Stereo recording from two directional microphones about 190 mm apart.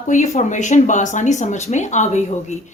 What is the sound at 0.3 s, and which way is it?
A woman's voice, 40° left (ahead or behind).